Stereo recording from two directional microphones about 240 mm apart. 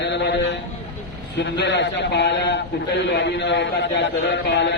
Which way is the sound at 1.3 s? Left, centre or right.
Left.